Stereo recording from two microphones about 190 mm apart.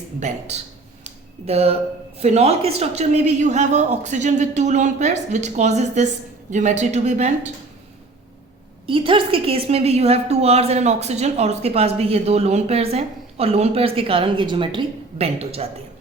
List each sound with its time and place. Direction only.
0.2 s a woman's voice: 35° right (ahead or behind)
8.9 s a woman's voice: 25° right (ahead or behind)